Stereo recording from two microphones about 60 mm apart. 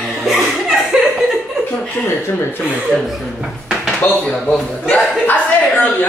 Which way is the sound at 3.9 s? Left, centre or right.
Left.